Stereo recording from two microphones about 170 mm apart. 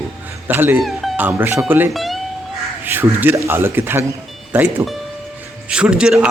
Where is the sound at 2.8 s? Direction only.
10° right (ahead or behind).